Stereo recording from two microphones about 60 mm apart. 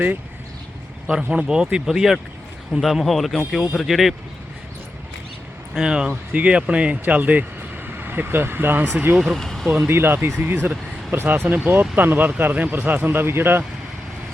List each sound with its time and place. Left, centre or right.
1.0 s speech: centre
5.7 s speech: centre; by 8.9 s right
9.1 s speech: centre
9.4 s vehicle: centre
9.9 s speech: right